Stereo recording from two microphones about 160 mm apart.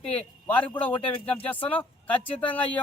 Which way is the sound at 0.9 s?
35° left (ahead or behind).